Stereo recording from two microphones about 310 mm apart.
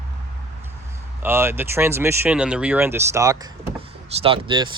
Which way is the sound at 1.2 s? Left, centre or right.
Centre.